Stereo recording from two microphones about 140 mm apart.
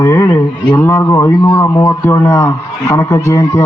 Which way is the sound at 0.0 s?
20° left (ahead or behind).